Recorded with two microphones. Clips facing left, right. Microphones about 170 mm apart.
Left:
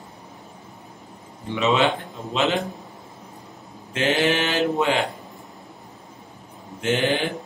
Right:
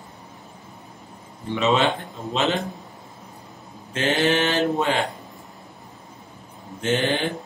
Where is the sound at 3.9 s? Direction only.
15° left (ahead or behind).